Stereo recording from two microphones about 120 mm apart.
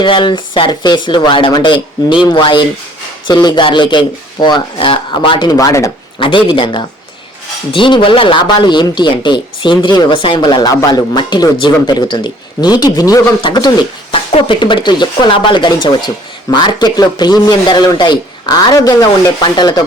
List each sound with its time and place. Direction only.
0.0 s speech: 40° left (ahead or behind)
6.1 s speech: 45° left (ahead or behind)